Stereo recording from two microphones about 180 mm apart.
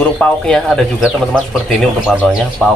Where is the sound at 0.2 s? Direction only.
5° left (ahead or behind).